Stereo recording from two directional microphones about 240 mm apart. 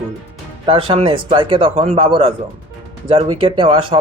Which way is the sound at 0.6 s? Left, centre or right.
Right.